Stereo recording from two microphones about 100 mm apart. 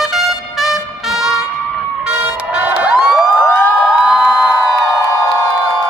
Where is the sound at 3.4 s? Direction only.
15° left (ahead or behind).